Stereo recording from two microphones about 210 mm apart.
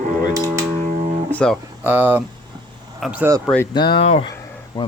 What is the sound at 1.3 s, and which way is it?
Speech, 5° left (ahead or behind).